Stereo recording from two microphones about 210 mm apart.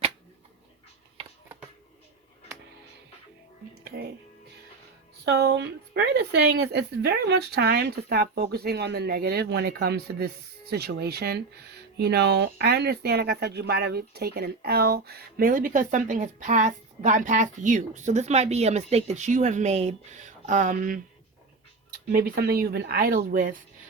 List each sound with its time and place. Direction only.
3.8 s music: 45° right (ahead or behind)
5.2 s a woman's voice: 55° right (ahead or behind)